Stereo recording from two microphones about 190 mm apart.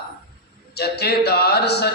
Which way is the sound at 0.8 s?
60° left (ahead or behind).